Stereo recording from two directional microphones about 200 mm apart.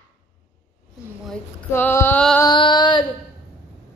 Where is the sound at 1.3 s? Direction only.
10° left (ahead or behind).